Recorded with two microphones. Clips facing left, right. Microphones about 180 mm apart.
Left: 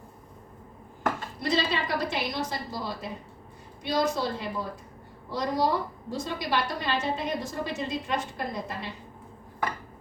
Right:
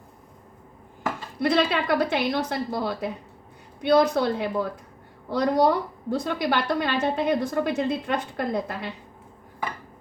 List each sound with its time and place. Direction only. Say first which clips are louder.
1.4 s a woman's voice: right 7 dB; 60° right (ahead or behind)